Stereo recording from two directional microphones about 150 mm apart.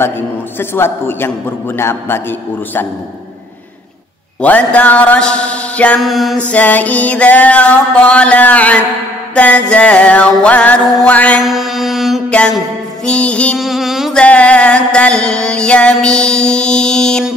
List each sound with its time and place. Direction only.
0.6 s music: 15° left (ahead or behind)
4.4 s music: 10° left (ahead or behind)
6.5 s music: 10° left (ahead or behind)
14.2 s music: 10° left (ahead or behind)